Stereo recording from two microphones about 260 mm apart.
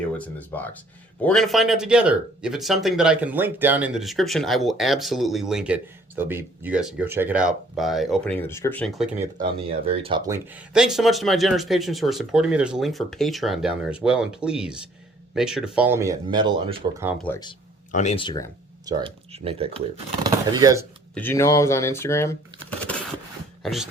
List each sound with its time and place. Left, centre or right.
0.0 s speech: centre
9.1 s speech: centre
17.2 s speech: centre
17.9 s speech: left
18.9 s speech: centre
21.2 s speech: centre
23.6 s speech: centre